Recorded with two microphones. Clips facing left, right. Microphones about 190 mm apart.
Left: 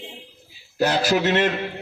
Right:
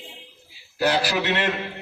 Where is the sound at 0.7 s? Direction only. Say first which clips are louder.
Left 2 dB; 45° left (ahead or behind).